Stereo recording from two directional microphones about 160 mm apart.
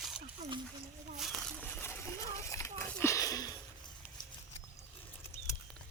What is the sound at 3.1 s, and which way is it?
Sniff, 20° left (ahead or behind).